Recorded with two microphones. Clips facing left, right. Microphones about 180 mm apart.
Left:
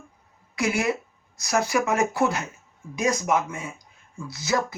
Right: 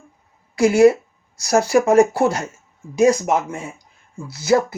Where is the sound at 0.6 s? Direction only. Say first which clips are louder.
Right 12 dB; 35° right (ahead or behind).